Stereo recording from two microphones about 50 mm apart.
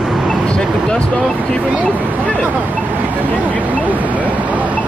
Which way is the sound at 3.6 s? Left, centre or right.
Right.